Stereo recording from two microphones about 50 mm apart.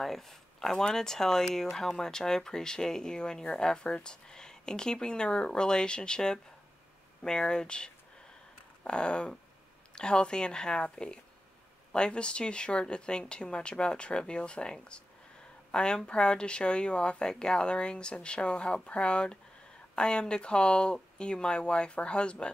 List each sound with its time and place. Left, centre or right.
0.0 s speech: centre; by 22.5 s left